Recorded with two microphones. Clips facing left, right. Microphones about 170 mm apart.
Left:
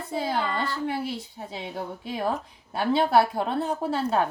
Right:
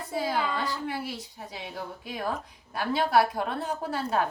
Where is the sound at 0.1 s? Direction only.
25° left (ahead or behind).